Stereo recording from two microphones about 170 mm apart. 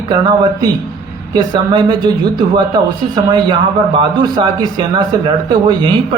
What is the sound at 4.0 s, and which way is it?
Speech, 25° right (ahead or behind).